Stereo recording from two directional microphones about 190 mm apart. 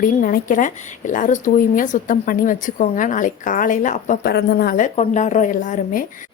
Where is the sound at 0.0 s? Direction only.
50° left (ahead or behind).